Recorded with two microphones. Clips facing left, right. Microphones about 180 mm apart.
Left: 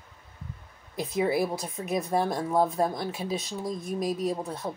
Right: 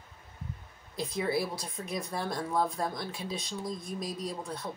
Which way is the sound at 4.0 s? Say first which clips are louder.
Left 12 dB; 45° left (ahead or behind).